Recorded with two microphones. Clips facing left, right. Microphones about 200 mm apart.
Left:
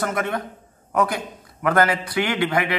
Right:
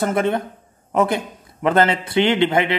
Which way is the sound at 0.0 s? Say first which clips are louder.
Right 5 dB; 25° right (ahead or behind).